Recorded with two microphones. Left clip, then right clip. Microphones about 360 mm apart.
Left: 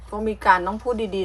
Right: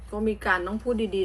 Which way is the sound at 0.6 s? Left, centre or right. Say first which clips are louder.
Left 4 dB; left.